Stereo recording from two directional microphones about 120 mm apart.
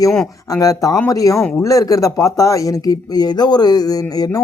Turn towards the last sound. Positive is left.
turn(degrees=30)  # may be behind; listen again after turning